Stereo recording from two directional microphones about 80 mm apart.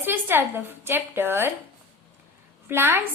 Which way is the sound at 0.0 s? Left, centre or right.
Right.